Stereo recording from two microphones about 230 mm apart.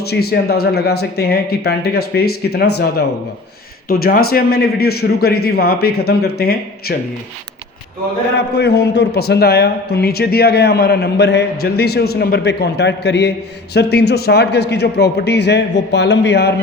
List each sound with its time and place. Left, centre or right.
0.0 s a man's voice: left
8.5 s a man's voice: left